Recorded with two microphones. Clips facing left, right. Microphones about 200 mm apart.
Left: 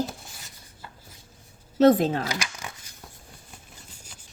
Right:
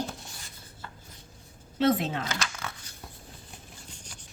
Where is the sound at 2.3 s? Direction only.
15° left (ahead or behind).